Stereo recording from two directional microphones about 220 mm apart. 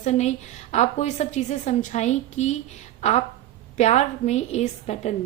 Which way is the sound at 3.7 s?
30° left (ahead or behind).